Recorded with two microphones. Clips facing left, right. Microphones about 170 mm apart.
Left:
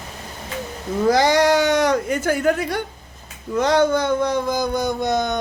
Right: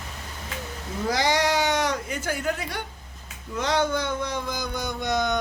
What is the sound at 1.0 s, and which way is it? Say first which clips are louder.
Speech: left 8 dB; 50° left (ahead or behind).